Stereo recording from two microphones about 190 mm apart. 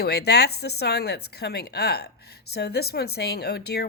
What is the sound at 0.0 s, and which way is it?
Speech, 60° left (ahead or behind).